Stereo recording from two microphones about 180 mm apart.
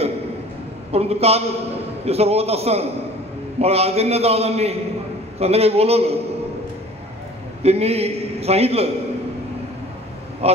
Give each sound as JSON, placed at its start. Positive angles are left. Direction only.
{"t": 0.9, "sound": "a man's voice", "side_deg": -35}
{"t": 7.6, "sound": "a man's voice", "side_deg": -35}
{"t": 10.4, "sound": "a man's voice", "side_deg": -35}